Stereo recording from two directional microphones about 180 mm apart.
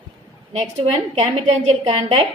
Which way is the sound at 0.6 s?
35° right (ahead or behind).